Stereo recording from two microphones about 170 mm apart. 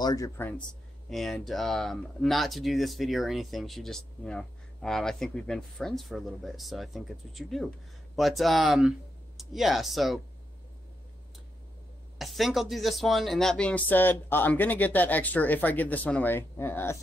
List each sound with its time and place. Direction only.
0.0 s speech: 20° left (ahead or behind)
1.1 s speech: centre (ahead or behind)
12.2 s speech: centre (ahead or behind)